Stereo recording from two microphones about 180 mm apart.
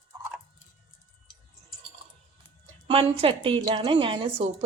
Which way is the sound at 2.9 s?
30° right (ahead or behind).